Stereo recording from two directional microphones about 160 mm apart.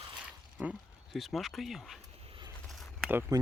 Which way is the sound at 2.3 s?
30° right (ahead or behind).